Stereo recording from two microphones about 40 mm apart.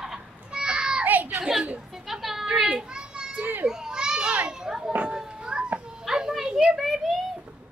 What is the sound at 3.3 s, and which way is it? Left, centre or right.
Speech, right.